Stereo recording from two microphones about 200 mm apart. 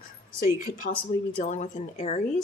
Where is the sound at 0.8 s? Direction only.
40° left (ahead or behind).